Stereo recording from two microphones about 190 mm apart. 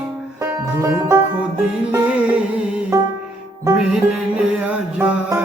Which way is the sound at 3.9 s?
5° right (ahead or behind).